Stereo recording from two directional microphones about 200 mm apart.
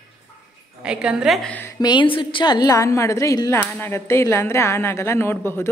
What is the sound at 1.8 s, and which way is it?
A woman's voice, 25° left (ahead or behind).